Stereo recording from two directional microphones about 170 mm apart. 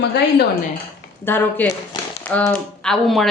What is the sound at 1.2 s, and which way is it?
Speech, 15° left (ahead or behind).